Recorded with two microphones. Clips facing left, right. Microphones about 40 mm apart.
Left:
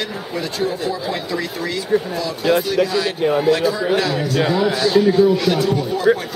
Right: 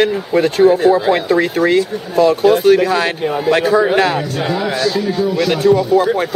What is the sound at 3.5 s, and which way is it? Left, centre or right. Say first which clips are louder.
Speech: right 5 dB; right.